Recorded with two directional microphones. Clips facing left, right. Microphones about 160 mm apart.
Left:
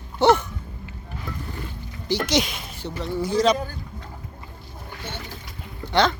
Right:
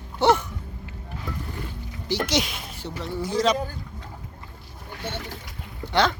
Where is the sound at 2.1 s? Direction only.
5° right (ahead or behind).